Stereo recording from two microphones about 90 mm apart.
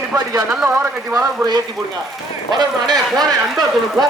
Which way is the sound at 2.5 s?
50° right (ahead or behind).